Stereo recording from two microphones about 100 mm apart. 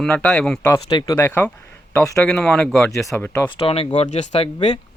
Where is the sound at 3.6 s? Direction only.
75° left (ahead or behind).